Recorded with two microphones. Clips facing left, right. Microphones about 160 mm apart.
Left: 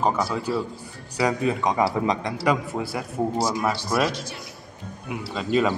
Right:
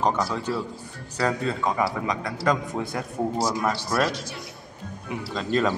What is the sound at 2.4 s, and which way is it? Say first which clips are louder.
A man's voice: even; 5° left (ahead or behind).